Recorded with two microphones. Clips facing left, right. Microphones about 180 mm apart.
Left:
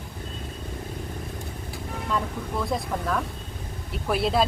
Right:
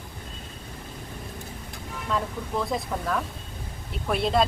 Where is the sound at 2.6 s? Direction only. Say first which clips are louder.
Left 2 dB; centre (ahead or behind).